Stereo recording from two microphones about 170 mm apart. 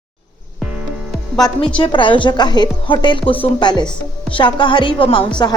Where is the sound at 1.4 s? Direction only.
20° left (ahead or behind).